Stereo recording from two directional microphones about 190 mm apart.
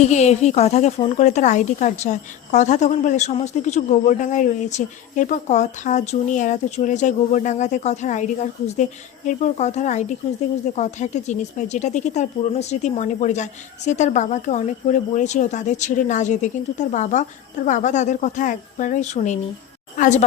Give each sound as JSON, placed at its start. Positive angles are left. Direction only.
{"t": 0.0, "sound": "speech", "side_deg": 35}